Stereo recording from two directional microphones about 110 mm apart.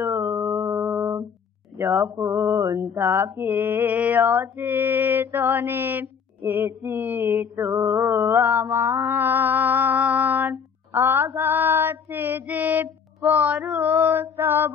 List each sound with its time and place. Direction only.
0.0 s a sound: 20° right (ahead or behind)
1.8 s speech: 20° right (ahead or behind)
2.1 s mantra: 25° right (ahead or behind)